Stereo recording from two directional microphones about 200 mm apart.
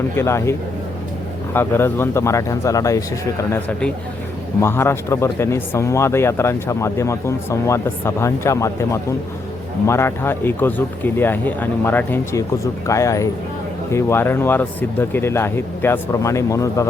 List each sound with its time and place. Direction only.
0.2 s speech: 15° left (ahead or behind)
1.5 s speech: 10° left (ahead or behind)